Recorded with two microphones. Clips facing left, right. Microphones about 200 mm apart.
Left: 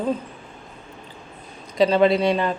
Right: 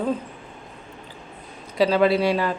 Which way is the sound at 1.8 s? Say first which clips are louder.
Left 1 dB; 5° right (ahead or behind).